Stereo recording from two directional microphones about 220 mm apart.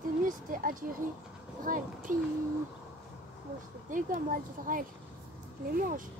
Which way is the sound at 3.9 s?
40° right (ahead or behind).